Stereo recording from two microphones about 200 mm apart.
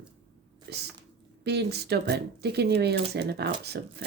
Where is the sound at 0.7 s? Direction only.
55° right (ahead or behind).